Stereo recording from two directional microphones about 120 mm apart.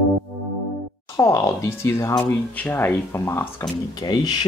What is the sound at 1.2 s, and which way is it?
Speech, 25° left (ahead or behind).